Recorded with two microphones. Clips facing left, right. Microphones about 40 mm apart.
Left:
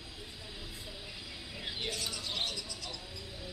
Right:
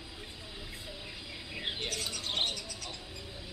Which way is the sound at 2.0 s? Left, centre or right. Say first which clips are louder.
Right 3 dB; right.